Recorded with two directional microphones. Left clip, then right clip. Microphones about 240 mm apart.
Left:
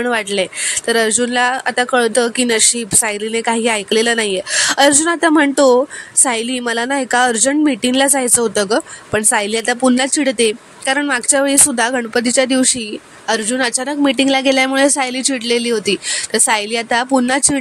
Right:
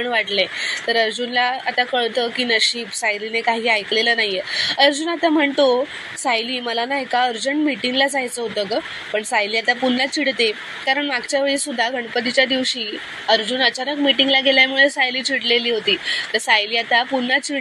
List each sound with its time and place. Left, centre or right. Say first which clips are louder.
0.0 s speech: left 2 dB; left